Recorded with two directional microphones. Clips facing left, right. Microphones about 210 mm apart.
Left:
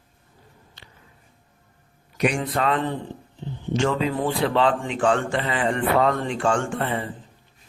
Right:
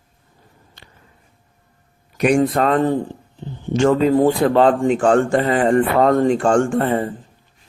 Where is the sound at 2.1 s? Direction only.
45° right (ahead or behind).